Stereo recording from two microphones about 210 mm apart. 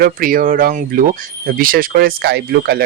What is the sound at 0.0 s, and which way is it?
Speech, 40° right (ahead or behind).